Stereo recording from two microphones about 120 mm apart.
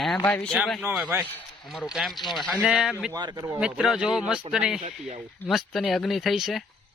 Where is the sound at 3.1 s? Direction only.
35° right (ahead or behind).